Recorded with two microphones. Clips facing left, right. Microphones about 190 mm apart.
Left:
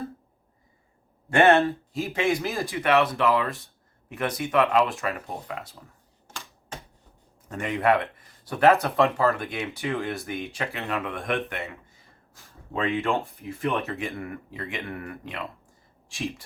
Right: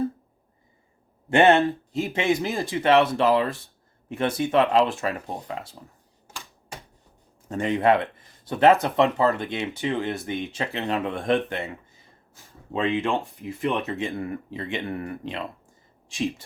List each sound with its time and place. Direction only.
1.3 s speech: 20° right (ahead or behind)
2.6 s speech: 30° right (ahead or behind)
7.4 s speech: 30° right (ahead or behind)
12.7 s speech: 20° right (ahead or behind)